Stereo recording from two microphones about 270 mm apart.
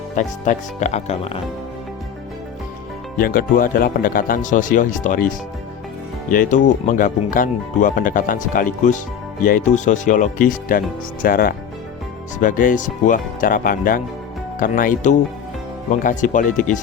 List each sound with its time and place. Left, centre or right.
0.2 s speech: left
3.2 s speech: left